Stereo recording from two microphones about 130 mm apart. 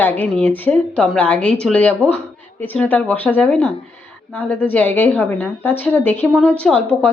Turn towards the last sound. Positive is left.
turn(degrees=10)  # may be behind; listen again after turning